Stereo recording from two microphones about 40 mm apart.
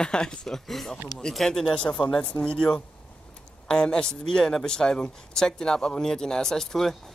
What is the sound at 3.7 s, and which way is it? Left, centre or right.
Speech, left.